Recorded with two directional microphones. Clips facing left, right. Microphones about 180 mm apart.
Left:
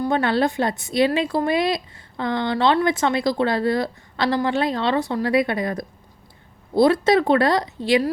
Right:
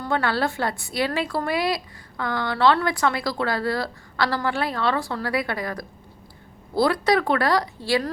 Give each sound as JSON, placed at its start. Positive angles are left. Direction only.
{"t": 0.0, "sound": "a woman's voice", "side_deg": 20}